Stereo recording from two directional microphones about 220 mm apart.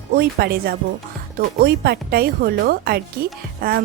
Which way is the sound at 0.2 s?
45° right (ahead or behind).